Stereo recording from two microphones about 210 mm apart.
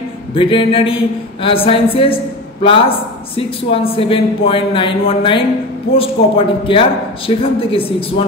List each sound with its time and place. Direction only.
0.3 s a man's voice: 25° left (ahead or behind)